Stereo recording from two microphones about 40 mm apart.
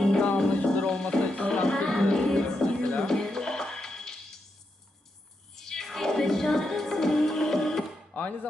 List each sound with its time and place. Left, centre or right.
0.0 s music: centre
5.5 s music: centre
8.1 s music: left